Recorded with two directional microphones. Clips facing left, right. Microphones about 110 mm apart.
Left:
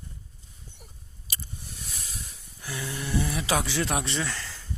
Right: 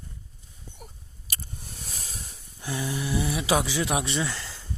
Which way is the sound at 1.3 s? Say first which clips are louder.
Right 1 dB; 45° right (ahead or behind).